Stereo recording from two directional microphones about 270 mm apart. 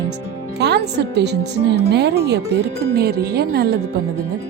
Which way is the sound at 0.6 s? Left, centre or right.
Right.